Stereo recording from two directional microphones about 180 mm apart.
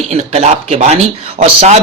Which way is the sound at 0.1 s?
35° right (ahead or behind).